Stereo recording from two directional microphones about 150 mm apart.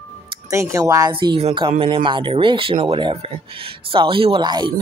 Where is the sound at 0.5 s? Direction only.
20° right (ahead or behind).